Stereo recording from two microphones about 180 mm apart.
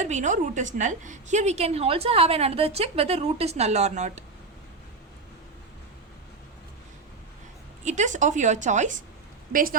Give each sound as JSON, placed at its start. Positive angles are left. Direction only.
{"t": 0.0, "sound": "a woman's voice", "side_deg": -45}
{"t": 7.9, "sound": "a woman's voice", "side_deg": -40}